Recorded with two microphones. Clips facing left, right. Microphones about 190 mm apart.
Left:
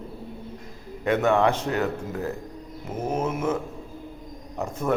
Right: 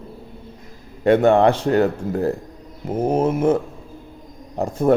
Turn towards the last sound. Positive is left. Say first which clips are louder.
# right 8 dB
turn(degrees=-30)  # may be behind; listen again after turning